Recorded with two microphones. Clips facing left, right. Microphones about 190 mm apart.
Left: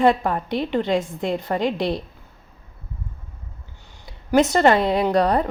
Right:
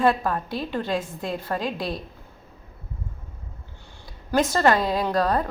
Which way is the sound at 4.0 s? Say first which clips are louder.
Left 5 dB; 20° left (ahead or behind).